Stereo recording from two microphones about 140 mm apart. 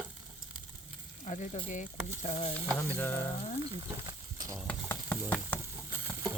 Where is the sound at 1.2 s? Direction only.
60° left (ahead or behind).